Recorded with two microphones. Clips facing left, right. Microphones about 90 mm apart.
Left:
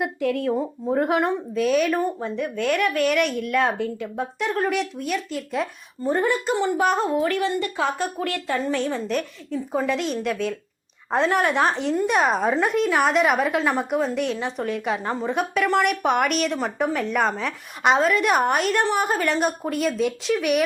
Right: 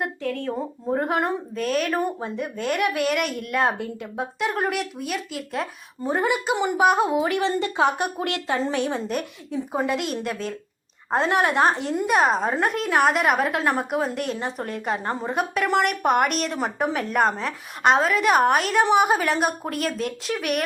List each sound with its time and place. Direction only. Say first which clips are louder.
0.0 s speech: left 4 dB; 10° left (ahead or behind)
0.9 s a woman's voice: left 2 dB; centre (ahead or behind)
2.0 s a woman's voice: left 1 dB; 15° right (ahead or behind)
7.4 s speech: right 2 dB; 25° right (ahead or behind)
9.1 s a woman's voice: left 1 dB; 10° right (ahead or behind)